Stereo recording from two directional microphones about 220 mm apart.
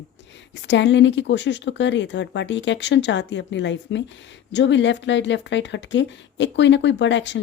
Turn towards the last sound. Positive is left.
turn(degrees=55)  # may be behind; listen again after turning